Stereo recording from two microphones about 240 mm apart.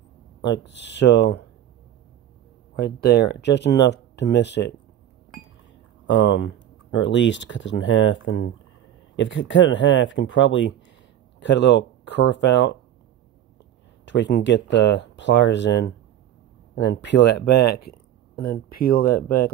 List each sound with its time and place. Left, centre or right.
0.4 s speech: left
2.8 s speech: left
6.0 s speech: left
14.0 s speech: left